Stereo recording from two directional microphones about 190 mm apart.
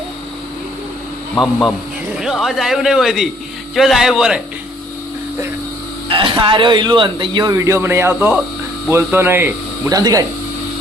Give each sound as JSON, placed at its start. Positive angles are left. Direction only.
{"t": 1.4, "sound": "speech", "side_deg": 0}
{"t": 6.1, "sound": "a man's voice", "side_deg": -25}